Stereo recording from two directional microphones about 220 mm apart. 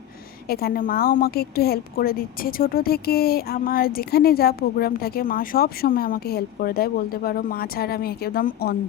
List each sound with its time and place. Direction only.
0.4 s a woman's voice: 45° left (ahead or behind)